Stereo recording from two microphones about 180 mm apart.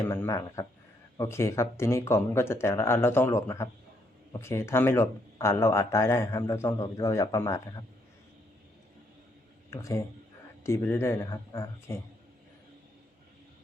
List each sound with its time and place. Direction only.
0.1 s speech: 15° left (ahead or behind)
9.6 s speech: 15° left (ahead or behind)